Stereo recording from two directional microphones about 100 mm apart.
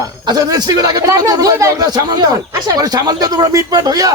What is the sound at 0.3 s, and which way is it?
Speech, 40° right (ahead or behind).